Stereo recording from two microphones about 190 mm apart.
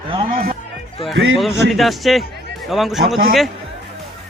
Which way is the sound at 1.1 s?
65° right (ahead or behind).